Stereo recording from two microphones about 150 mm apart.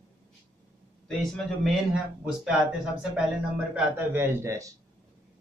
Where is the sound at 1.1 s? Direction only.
Centre (ahead or behind); by 4.7 s 20° right (ahead or behind).